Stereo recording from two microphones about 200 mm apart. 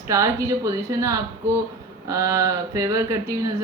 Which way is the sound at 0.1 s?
15° right (ahead or behind).